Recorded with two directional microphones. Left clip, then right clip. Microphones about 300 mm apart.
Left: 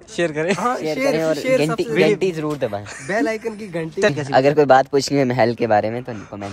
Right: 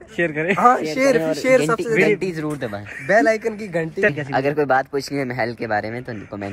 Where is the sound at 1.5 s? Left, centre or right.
Centre.